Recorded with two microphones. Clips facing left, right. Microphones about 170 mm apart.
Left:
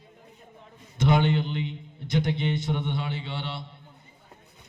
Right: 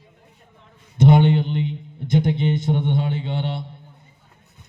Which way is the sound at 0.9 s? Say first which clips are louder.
Right 7 dB; 55° right (ahead or behind).